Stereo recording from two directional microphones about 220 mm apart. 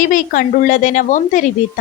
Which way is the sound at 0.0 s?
40° left (ahead or behind).